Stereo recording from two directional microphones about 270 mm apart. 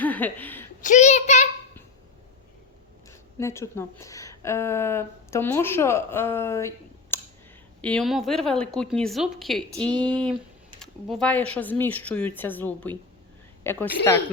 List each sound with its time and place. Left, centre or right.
0.0 s chuckle: centre
0.8 s a child's voice: left
3.1 s a woman's voice: centre